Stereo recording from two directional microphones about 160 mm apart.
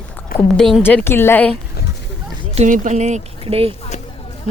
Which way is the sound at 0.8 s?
15° left (ahead or behind).